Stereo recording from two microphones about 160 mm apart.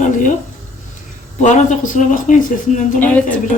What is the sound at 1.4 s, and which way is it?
Speech, 50° left (ahead or behind).